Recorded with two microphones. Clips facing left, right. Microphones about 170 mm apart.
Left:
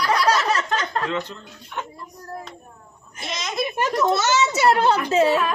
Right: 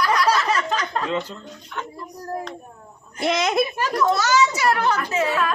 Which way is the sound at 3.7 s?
25° left (ahead or behind).